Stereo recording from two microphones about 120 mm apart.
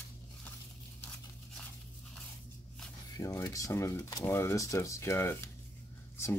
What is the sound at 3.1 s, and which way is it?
Speech, 30° left (ahead or behind).